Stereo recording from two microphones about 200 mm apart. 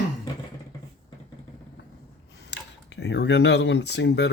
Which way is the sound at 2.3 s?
55° left (ahead or behind).